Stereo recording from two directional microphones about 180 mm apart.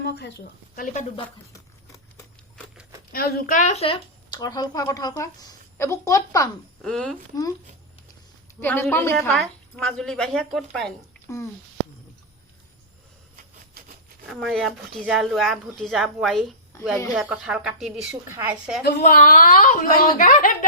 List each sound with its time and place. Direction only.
0.0 s a sound: 70° left (ahead or behind)
3.1 s a child's voice: 55° left (ahead or behind); by 6.5 s 20° left (ahead or behind)
6.8 s a woman's voice: 5° left (ahead or behind)
8.6 s a woman's voice: 10° left (ahead or behind)
11.3 s speech: 15° left (ahead or behind)
14.3 s a woman's voice: centre (ahead or behind)
18.1 s a woman's voice: 15° right (ahead or behind)
18.8 s a woman's voice: 55° left (ahead or behind)